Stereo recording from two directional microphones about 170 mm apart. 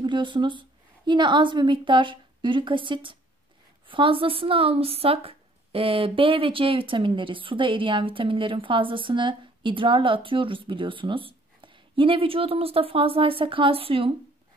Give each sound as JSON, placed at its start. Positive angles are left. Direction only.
{"t": 0.0, "sound": "a woman's voice", "side_deg": -30}